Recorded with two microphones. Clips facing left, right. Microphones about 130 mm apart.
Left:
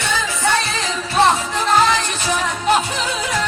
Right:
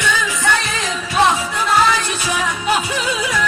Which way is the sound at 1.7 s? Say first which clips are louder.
Even; 40° left (ahead or behind).